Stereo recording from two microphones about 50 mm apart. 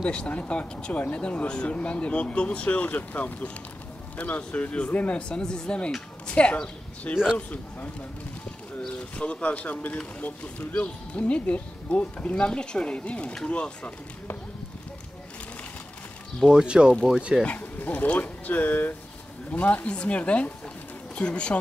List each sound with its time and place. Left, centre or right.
0.0 s speech: left
8.8 s speech: left
16.4 s speech: centre
17.5 s speech: left